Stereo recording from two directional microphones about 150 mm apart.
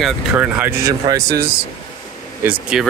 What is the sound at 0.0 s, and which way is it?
Speech, 10° right (ahead or behind).